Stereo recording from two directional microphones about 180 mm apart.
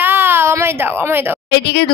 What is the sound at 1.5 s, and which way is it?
Speech, 70° left (ahead or behind).